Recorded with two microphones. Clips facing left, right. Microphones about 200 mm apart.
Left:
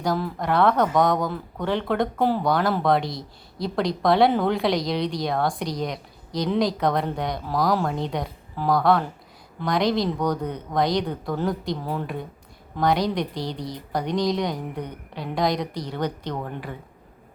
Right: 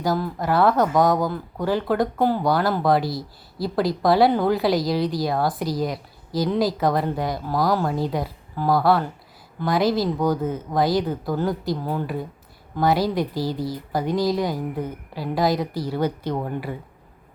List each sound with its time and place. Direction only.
0.0 s speech: 5° right (ahead or behind)